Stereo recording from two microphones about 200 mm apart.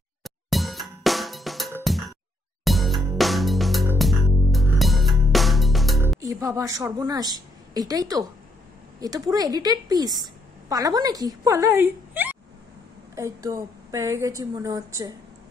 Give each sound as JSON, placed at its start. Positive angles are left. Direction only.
{"t": 0.2, "sound": "drum", "side_deg": 0}
{"t": 2.6, "sound": "music", "side_deg": 0}
{"t": 6.2, "sound": "a woman's voice", "side_deg": -15}